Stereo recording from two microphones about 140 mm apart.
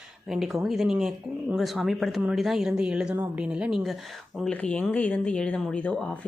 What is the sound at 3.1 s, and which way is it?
Speech, 15° right (ahead or behind).